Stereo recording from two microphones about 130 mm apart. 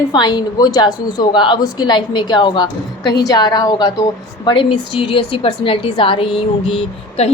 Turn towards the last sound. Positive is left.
turn(degrees=45)  # may be behind; listen again after turning